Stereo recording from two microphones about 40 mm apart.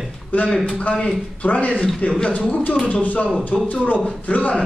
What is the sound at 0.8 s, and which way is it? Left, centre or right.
Speech, left.